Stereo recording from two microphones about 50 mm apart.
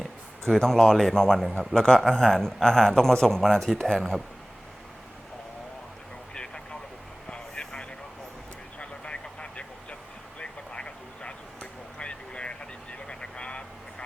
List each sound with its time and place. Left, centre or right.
0.0 s a man's voice: centre
6.3 s vehicle: centre
10.4 s a sound: centre